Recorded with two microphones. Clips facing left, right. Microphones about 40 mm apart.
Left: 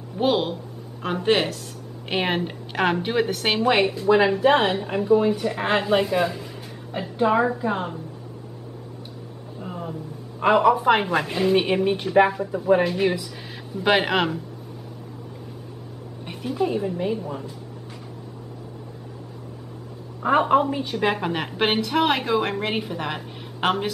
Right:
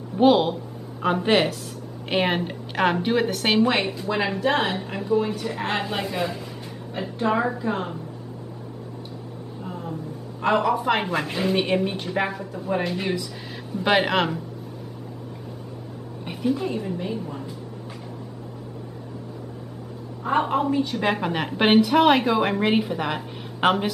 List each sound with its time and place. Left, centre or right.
0.2 s a woman's voice: centre
9.6 s vehicle: centre
10.4 s a woman's voice: centre
16.3 s a woman's voice: centre
20.2 s a woman's voice: centre